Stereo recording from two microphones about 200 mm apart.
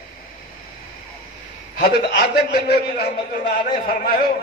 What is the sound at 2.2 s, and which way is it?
A man's voice, 50° left (ahead or behind).